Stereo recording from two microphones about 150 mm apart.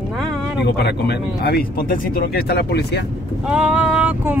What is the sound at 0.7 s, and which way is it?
Speech, 90° left.